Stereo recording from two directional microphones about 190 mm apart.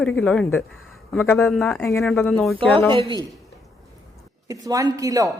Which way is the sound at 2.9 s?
25° right (ahead or behind).